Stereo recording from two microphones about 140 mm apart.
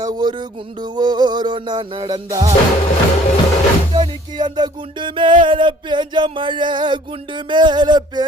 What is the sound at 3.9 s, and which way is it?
Music, 30° right (ahead or behind).